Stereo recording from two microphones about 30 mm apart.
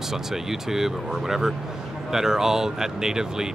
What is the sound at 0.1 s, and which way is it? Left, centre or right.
Speech, centre.